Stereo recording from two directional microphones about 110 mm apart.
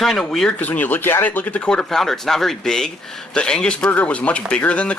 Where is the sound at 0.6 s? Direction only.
15° left (ahead or behind).